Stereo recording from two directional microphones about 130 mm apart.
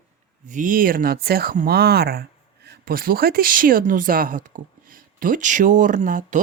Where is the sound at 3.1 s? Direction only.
90° right.